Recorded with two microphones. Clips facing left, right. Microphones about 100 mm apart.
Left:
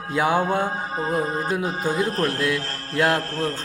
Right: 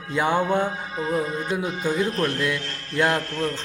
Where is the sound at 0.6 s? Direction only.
40° left (ahead or behind).